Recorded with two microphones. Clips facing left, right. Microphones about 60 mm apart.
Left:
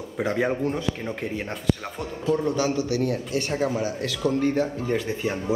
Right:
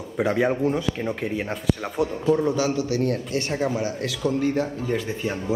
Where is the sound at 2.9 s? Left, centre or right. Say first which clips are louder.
Right 1 dB; right.